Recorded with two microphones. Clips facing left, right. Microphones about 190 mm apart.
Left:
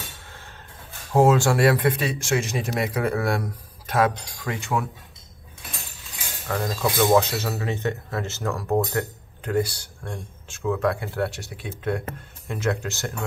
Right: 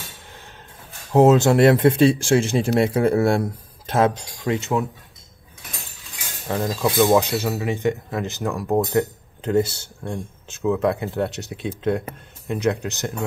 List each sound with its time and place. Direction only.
1.1 s speech: 20° right (ahead or behind)
6.4 s speech: 20° right (ahead or behind)